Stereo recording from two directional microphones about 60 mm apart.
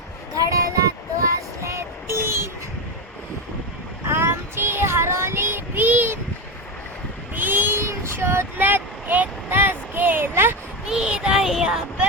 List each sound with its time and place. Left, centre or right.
0.3 s music: right
4.1 s child singing: right
7.3 s a sound: right
10.8 s child singing: centre